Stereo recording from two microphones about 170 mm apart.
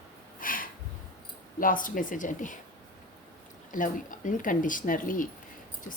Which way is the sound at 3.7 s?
50° left (ahead or behind).